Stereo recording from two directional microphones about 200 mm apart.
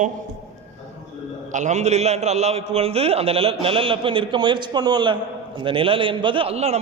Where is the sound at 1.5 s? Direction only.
35° right (ahead or behind).